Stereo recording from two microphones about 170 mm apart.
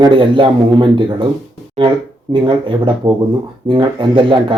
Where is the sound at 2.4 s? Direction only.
30° right (ahead or behind).